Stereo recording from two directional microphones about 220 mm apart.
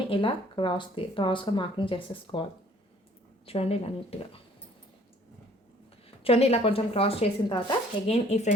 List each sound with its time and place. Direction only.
0.1 s speech: 20° left (ahead or behind)
6.2 s speech: 25° left (ahead or behind)